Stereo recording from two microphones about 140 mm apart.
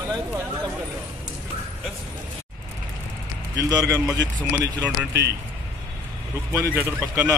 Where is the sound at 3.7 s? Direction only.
25° right (ahead or behind).